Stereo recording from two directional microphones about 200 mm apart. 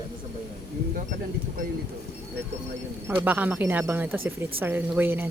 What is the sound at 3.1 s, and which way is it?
Speech, 10° right (ahead or behind).